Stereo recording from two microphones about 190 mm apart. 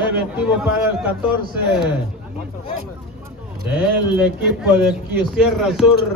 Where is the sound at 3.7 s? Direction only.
5° right (ahead or behind).